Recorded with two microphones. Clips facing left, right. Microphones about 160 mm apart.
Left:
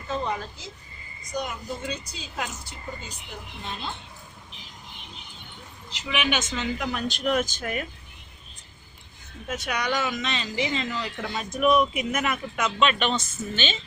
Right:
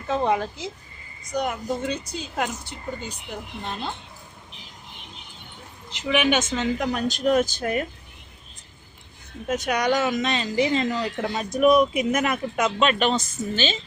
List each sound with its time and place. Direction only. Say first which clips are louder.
0.1 s a woman's voice: right 7 dB; 65° right (ahead or behind)
5.9 s a woman's voice: right 6 dB; 50° right (ahead or behind)
9.5 s a woman's voice: right 6 dB; 40° right (ahead or behind)